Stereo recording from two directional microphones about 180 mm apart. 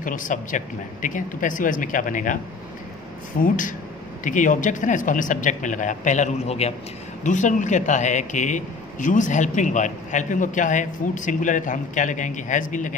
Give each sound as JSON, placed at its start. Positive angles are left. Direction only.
{"t": 0.0, "sound": "a man's voice", "side_deg": 45}
{"t": 3.3, "sound": "a man's voice", "side_deg": 50}